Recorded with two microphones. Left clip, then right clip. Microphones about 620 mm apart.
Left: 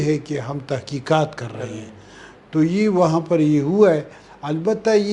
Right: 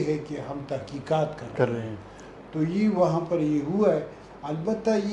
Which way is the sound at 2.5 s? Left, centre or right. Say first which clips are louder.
Left 7 dB; left.